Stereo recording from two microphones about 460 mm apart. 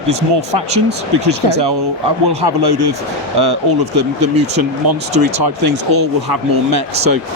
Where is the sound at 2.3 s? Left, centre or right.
Right.